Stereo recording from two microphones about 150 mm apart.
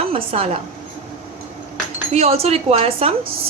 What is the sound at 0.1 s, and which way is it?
Speech, 40° right (ahead or behind).